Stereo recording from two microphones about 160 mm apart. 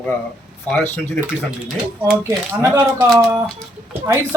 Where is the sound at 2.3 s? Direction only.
15° right (ahead or behind).